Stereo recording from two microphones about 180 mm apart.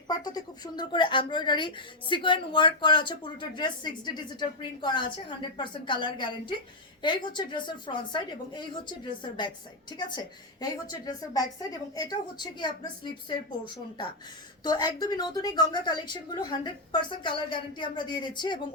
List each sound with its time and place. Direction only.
0.1 s speech: 20° left (ahead or behind)
11.0 s speech: 20° left (ahead or behind)